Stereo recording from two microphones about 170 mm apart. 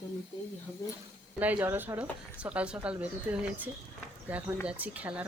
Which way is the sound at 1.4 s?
10° right (ahead or behind).